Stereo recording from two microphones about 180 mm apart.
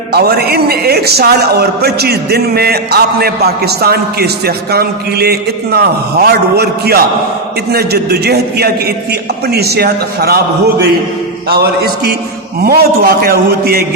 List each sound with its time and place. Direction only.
0.1 s a man's voice: 60° right (ahead or behind)